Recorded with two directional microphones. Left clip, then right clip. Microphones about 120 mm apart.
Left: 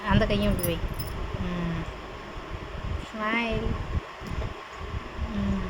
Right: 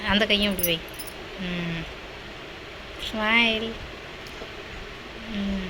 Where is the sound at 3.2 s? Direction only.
5° right (ahead or behind).